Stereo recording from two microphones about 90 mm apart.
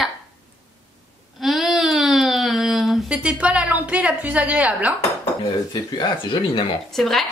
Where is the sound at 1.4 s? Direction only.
5° right (ahead or behind).